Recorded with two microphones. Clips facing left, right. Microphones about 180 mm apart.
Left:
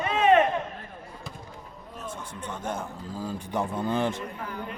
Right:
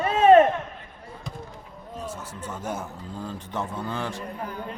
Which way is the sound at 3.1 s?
10° left (ahead or behind).